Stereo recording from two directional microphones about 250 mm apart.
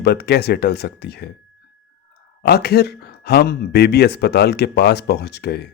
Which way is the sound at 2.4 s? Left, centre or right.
Left.